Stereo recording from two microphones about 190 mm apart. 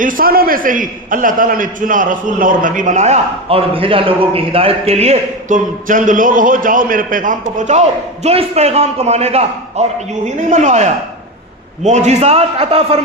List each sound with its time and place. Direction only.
0.0 s a man's voice: 45° right (ahead or behind); by 13.0 s 30° right (ahead or behind)